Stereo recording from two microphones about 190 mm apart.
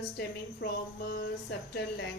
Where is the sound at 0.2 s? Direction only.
55° left (ahead or behind).